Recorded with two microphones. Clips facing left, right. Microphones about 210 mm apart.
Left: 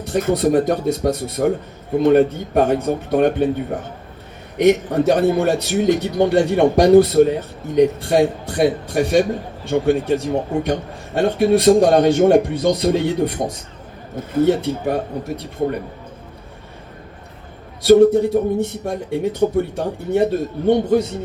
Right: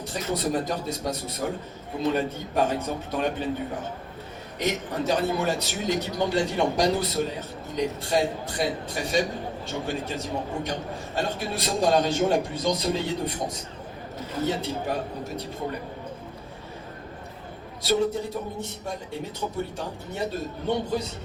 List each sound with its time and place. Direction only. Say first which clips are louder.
0.1 s a man's voice: left 11 dB; 55° left (ahead or behind)
17.8 s a man's voice: left 14 dB; 55° left (ahead or behind)